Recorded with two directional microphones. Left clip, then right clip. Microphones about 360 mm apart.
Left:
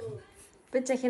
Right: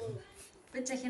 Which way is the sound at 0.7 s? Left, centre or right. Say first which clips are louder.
Left 10 dB; centre.